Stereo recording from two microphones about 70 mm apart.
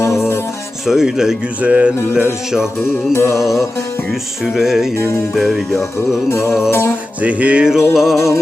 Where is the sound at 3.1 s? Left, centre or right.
Left.